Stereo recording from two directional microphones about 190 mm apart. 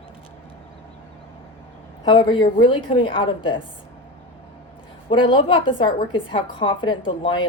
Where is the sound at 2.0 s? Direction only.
25° left (ahead or behind).